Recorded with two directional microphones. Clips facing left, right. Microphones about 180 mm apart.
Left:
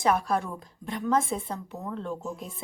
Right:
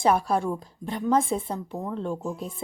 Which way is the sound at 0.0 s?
30° right (ahead or behind).